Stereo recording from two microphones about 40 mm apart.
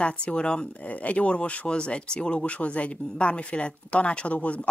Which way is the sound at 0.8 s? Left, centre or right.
Left.